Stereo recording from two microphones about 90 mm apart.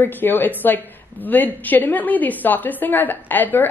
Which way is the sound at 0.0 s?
25° left (ahead or behind).